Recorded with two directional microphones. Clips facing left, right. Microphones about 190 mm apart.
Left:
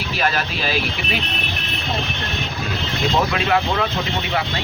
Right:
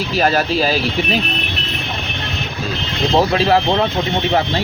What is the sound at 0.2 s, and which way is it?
Speech, 40° right (ahead or behind).